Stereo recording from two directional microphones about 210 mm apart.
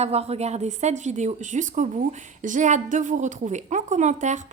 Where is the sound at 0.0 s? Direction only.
30° right (ahead or behind).